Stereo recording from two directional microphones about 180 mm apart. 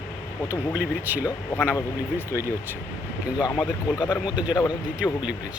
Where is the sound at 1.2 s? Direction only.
15° left (ahead or behind).